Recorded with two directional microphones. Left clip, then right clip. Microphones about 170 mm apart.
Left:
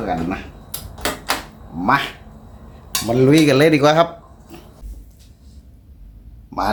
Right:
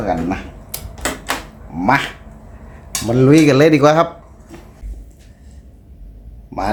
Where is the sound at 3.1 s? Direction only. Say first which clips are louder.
Right 2 dB; 25° right (ahead or behind).